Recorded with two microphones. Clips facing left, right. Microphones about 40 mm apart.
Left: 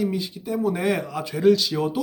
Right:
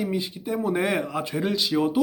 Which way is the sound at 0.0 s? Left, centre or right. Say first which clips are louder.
Left 1 dB; right.